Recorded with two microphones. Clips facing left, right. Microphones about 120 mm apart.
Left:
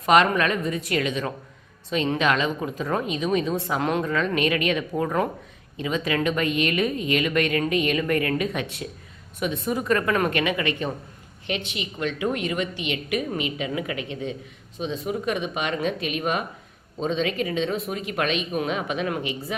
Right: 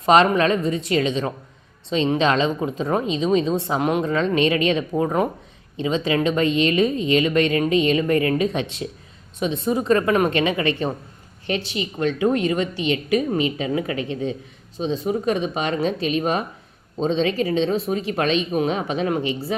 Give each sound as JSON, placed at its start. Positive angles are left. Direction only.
{"t": 0.0, "sound": "a woman's voice", "side_deg": -30}